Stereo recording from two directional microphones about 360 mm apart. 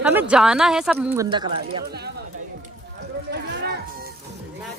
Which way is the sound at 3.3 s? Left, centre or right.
Right.